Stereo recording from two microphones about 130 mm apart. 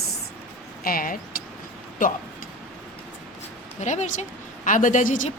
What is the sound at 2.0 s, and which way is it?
Speech, 90° left.